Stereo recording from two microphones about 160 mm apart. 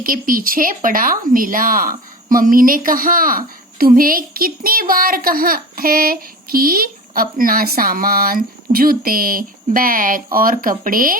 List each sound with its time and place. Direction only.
0.0 s speech: 60° right (ahead or behind)